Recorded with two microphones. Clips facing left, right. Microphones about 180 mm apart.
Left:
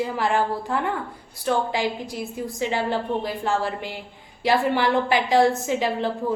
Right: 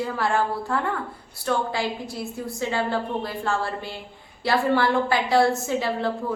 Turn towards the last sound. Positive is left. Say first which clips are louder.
# left 1 dB
turn(degrees=15)  # may be behind; listen again after turning